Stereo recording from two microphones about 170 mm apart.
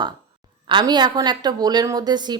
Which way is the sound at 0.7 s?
25° right (ahead or behind).